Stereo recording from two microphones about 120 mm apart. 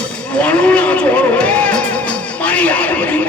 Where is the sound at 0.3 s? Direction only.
10° left (ahead or behind).